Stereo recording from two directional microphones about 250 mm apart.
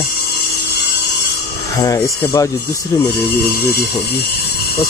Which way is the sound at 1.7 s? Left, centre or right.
Centre.